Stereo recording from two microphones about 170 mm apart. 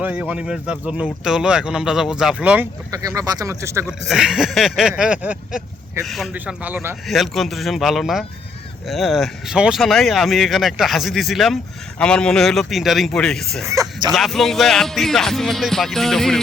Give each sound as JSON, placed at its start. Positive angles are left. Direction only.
{"t": 0.0, "sound": "speech", "side_deg": -10}
{"t": 2.9, "sound": "speech", "side_deg": -20}
{"t": 3.8, "sound": "speech", "side_deg": -5}
{"t": 13.7, "sound": "speech", "side_deg": -20}
{"t": 14.1, "sound": "speech", "side_deg": 0}